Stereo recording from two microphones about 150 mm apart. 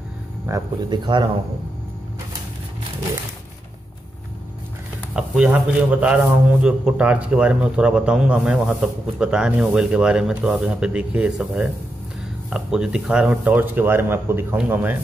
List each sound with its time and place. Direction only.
0.5 s speech: 30° right (ahead or behind)
5.1 s a man's voice: 5° right (ahead or behind)